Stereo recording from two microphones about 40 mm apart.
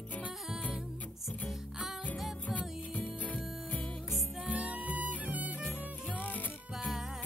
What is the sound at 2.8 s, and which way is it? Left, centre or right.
Music, left.